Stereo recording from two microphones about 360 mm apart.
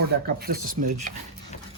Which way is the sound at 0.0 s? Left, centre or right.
Right.